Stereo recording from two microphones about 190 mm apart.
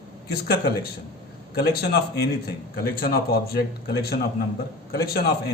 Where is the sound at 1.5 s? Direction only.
55° left (ahead or behind).